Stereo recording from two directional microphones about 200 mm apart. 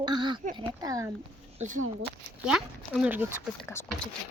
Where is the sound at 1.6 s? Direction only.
40° right (ahead or behind).